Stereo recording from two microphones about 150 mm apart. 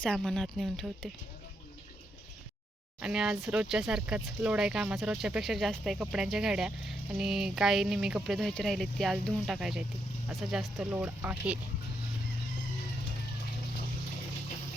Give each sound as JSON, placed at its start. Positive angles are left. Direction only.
{"t": 0.0, "sound": "speech", "side_deg": 5}
{"t": 3.0, "sound": "speech", "side_deg": -5}